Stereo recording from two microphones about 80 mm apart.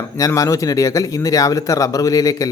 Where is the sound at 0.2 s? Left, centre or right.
Left.